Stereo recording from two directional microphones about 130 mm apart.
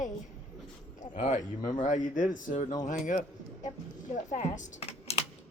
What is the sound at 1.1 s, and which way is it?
Speech, 80° left.